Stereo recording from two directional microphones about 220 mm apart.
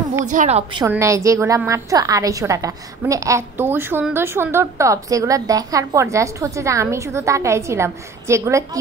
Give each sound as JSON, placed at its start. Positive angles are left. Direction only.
{"t": 0.2, "sound": "a woman's voice", "side_deg": -35}
{"t": 0.8, "sound": "a woman's voice", "side_deg": -15}